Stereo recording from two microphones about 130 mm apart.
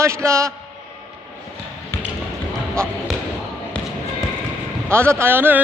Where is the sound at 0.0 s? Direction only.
20° right (ahead or behind).